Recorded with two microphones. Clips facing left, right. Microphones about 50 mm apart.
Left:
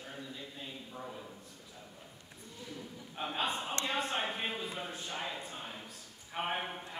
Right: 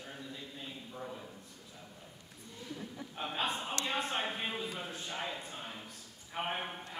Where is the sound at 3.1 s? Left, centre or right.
Centre.